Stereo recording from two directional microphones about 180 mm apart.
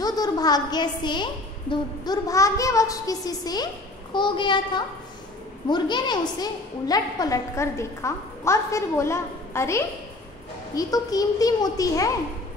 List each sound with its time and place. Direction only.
0.0 s a woman's voice: 20° left (ahead or behind)